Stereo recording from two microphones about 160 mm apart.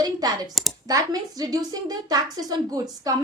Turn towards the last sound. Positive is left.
turn(degrees=-25)  # may be behind; listen again after turning